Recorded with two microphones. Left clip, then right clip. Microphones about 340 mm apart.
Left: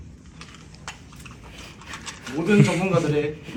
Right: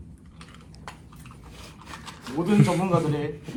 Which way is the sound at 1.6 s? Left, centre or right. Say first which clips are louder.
Left 4 dB; right.